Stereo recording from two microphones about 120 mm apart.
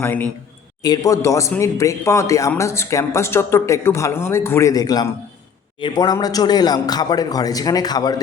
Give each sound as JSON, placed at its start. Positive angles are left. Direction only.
{"t": 0.0, "sound": "a man's voice", "side_deg": 15}
{"t": 0.8, "sound": "a man's voice", "side_deg": 30}